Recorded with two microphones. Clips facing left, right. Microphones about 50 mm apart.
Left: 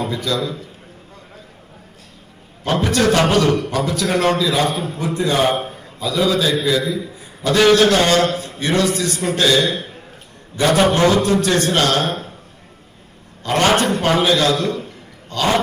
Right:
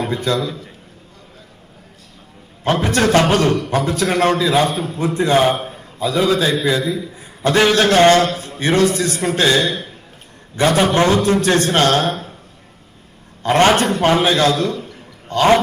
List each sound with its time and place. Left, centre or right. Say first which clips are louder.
0.0 s a man's voice: right 2 dB; right
2.6 s a man's voice: even; right
9.6 s a man's voice: even; left
10.5 s a man's voice: even; right
13.4 s a man's voice: right 3 dB; right
14.6 s a man's voice: right 1 dB; left
15.3 s a man's voice: right 5 dB; right